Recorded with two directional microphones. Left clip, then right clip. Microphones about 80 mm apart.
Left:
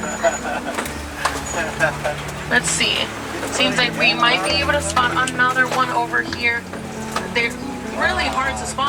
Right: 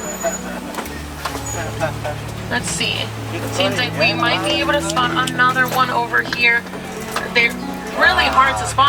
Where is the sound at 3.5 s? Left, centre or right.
Centre.